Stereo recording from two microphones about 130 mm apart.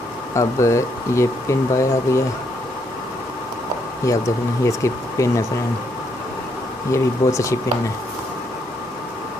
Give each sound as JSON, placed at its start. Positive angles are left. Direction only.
{"t": 0.3, "sound": "speech", "side_deg": 20}
{"t": 4.1, "sound": "speech", "side_deg": 25}
{"t": 6.9, "sound": "speech", "side_deg": 25}